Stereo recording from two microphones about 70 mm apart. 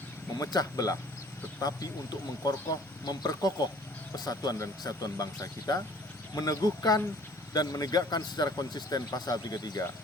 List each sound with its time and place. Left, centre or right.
0.3 s speech: left